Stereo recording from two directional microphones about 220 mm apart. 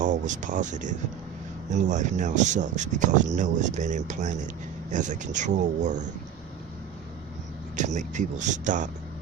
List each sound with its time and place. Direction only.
0.0 s speech: 35° right (ahead or behind)
7.8 s speech: 35° right (ahead or behind)